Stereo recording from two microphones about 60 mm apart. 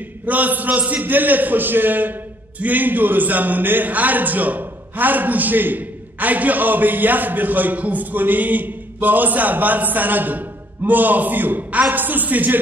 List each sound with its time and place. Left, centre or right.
0.2 s a man's voice: right